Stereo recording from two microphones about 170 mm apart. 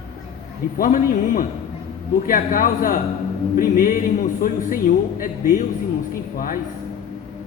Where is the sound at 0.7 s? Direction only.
55° left (ahead or behind).